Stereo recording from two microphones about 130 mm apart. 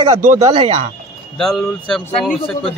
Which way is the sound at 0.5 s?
40° right (ahead or behind).